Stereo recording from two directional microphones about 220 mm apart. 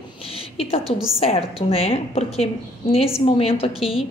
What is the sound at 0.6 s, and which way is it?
A woman's voice, 25° left (ahead or behind).